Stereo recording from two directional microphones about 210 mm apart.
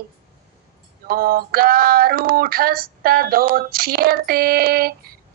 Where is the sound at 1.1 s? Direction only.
45° right (ahead or behind).